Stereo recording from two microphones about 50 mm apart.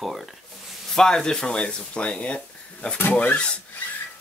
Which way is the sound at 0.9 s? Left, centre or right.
Centre.